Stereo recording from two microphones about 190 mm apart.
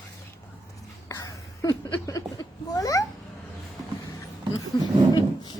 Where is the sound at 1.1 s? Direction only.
20° left (ahead or behind).